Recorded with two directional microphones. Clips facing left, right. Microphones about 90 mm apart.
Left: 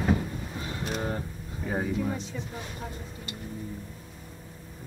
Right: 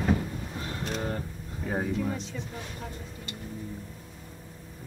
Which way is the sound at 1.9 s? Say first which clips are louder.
Left 1 dB; 5° left (ahead or behind).